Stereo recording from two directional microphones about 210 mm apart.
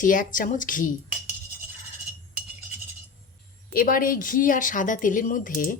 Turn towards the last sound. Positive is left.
turn(degrees=40)  # may be behind; listen again after turning